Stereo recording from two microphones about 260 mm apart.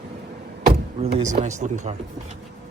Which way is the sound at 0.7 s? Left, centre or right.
Right.